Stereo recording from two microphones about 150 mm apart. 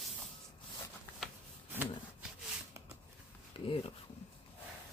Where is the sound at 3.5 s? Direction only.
35° left (ahead or behind).